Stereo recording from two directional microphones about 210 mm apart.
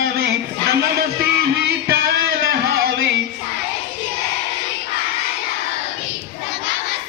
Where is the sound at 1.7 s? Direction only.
50° right (ahead or behind).